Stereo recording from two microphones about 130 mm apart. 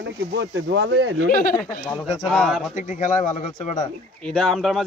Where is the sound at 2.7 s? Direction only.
70° left (ahead or behind).